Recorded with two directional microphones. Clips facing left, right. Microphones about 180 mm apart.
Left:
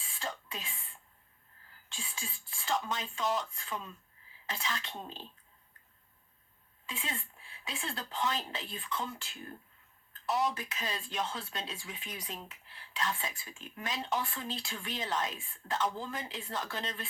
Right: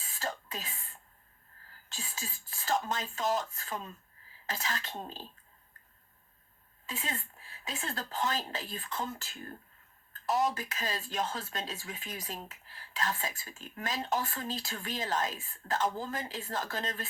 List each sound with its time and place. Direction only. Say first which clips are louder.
0.0 s throat clearing: right 3 dB; 45° right (ahead or behind)
1.9 s speech: right 1 dB; 45° right (ahead or behind)
6.8 s speech: right 2 dB; 45° right (ahead or behind)